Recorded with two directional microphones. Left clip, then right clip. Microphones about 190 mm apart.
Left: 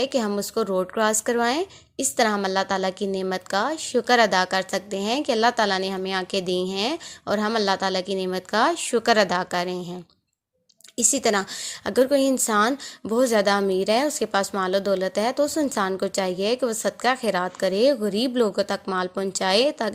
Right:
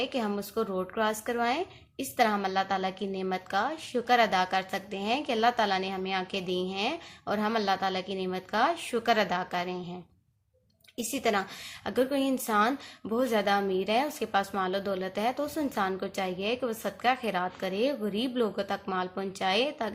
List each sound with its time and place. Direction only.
0.0 s speech: 45° left (ahead or behind)